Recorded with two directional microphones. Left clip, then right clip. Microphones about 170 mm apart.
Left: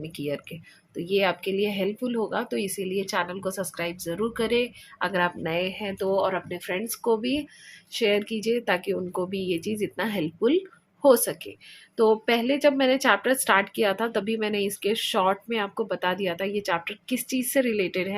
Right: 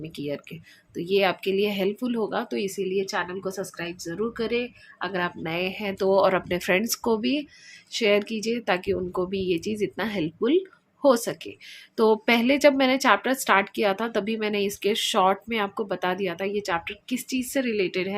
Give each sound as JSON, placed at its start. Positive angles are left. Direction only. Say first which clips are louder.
{"t": 0.0, "sound": "speech", "louder": "left 1 dB", "side_deg": 0}
{"t": 6.1, "sound": "a woman's voice", "louder": "right 5 dB", "side_deg": -30}
{"t": 11.9, "sound": "a woman's voice", "louder": "right 1 dB", "side_deg": -20}